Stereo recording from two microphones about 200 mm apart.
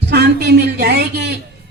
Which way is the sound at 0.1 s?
55° right (ahead or behind).